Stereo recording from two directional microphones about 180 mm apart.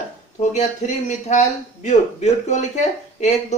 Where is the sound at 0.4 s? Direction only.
40° left (ahead or behind).